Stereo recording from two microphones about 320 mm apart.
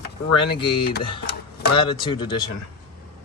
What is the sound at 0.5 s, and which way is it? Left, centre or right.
Speech, centre.